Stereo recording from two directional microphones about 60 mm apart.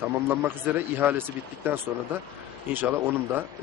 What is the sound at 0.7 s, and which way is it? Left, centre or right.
A man's voice, right.